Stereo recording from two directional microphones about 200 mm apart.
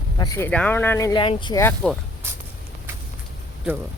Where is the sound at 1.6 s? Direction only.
10° left (ahead or behind).